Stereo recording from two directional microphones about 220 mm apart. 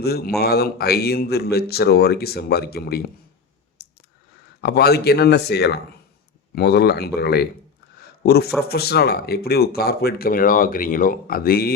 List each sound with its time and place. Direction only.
0.0 s speech: 45° left (ahead or behind)
3.8 s clicking: 45° left (ahead or behind)
4.6 s speech: 45° left (ahead or behind)